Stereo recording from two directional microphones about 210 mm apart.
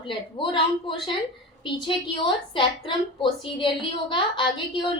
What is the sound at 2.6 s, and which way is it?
A woman's voice, 25° left (ahead or behind).